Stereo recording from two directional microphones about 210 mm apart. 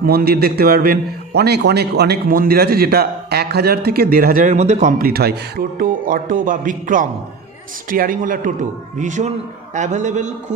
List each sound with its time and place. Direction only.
0.0 s a man's voice: 45° right (ahead or behind)